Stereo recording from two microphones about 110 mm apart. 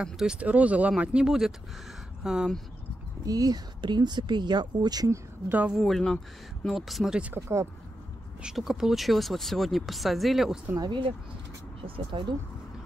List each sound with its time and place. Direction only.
0.0 s speech: 5° right (ahead or behind)
3.3 s speech: 35° right (ahead or behind)
5.5 s speech: 15° right (ahead or behind)
5.8 s speech: 5° left (ahead or behind)
7.3 s speech: 25° right (ahead or behind)
8.4 s speech: 5° right (ahead or behind)
10.8 s speech: 45° right (ahead or behind)